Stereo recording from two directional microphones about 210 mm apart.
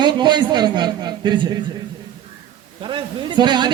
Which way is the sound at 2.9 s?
20° right (ahead or behind).